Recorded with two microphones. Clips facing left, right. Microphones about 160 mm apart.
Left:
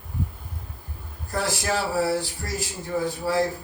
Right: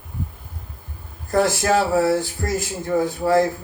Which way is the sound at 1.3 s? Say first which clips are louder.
Right 8 dB; 50° right (ahead or behind).